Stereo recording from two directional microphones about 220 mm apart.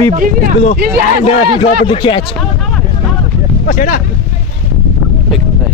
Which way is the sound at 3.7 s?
35° left (ahead or behind).